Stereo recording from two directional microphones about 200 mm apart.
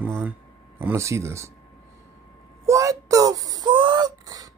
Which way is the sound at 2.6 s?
15° right (ahead or behind).